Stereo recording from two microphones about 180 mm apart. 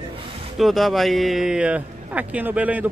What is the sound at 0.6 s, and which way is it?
Speech, centre (ahead or behind).